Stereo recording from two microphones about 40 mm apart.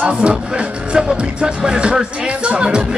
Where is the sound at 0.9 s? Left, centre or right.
Right.